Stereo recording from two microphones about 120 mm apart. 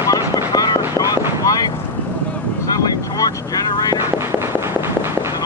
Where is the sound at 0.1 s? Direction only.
30° left (ahead or behind).